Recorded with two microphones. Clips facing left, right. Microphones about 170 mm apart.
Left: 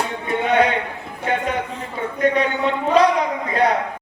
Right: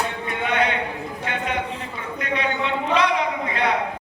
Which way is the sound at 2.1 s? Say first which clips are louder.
Left 6 dB; 40° left (ahead or behind).